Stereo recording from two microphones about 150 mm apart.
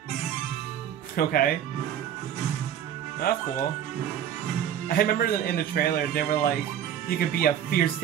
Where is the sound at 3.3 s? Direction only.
90° left.